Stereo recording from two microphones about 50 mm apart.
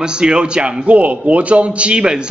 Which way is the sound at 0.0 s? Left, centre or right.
Centre.